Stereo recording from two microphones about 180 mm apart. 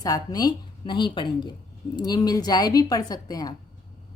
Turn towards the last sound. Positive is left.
turn(degrees=20)  # may be behind; listen again after turning